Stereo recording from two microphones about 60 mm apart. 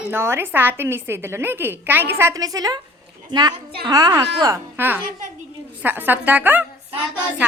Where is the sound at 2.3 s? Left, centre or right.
Right.